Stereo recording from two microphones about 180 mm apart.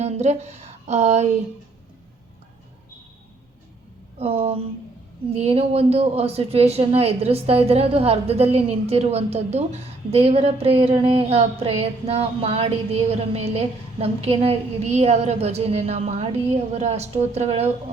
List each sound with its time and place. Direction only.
0.0 s speech: 35° right (ahead or behind)
4.2 s speech: 30° right (ahead or behind)